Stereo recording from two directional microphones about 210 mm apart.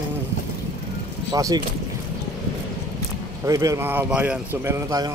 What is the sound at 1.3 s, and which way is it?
Speech, 15° right (ahead or behind).